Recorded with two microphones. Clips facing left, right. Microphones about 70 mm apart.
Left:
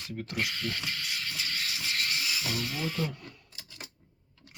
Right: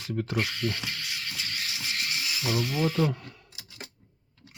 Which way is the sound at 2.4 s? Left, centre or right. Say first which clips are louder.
Right 6 dB; centre.